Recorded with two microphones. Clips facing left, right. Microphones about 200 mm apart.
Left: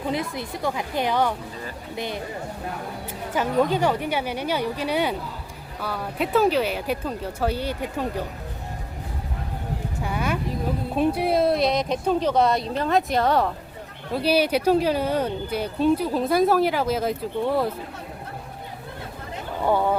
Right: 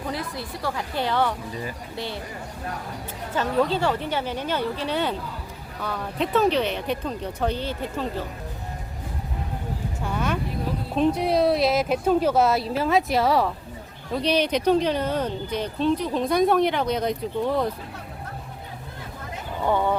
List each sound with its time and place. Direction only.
0.0 s speech: 20° left (ahead or behind)
3.3 s speech: 15° left (ahead or behind)
10.0 s a sound: 10° left (ahead or behind)
10.9 s speech: 10° left (ahead or behind)
19.6 s speech: 10° left (ahead or behind)